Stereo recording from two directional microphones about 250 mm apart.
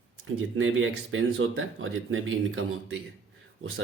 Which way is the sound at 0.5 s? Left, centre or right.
Right.